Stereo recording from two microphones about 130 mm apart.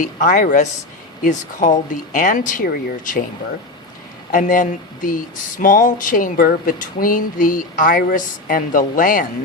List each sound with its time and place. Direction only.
0.0 s a woman's voice: 80° left
4.3 s speech: 90° left